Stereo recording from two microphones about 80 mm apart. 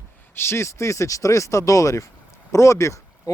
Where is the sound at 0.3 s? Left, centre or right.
Left.